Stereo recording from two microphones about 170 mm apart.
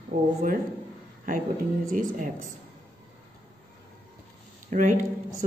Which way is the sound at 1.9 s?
50° right (ahead or behind).